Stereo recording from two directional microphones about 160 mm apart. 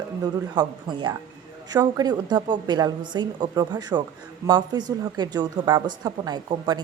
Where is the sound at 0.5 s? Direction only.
30° right (ahead or behind).